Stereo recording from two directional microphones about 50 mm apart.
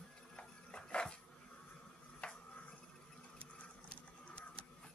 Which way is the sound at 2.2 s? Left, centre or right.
Centre.